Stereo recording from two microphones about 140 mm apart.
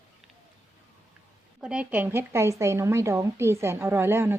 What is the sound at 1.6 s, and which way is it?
A woman's voice, 5° right (ahead or behind).